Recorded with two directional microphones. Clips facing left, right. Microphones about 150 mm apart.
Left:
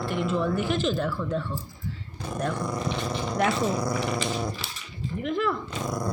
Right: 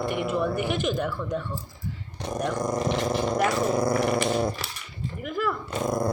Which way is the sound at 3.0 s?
50° right (ahead or behind).